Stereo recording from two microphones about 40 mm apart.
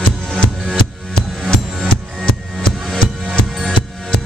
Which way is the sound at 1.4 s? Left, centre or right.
Left.